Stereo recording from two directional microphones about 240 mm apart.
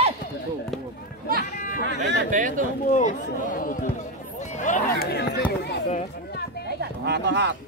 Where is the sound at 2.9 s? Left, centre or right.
Left.